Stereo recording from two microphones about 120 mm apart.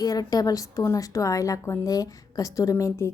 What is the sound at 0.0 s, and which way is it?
A woman's voice, 30° left (ahead or behind).